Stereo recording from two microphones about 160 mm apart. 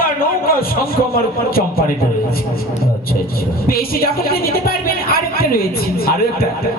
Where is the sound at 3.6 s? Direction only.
70° left (ahead or behind).